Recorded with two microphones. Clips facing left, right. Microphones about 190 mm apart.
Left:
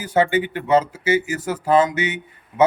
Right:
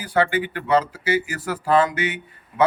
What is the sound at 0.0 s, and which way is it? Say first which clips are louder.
Speech: left 2 dB; 20° left (ahead or behind).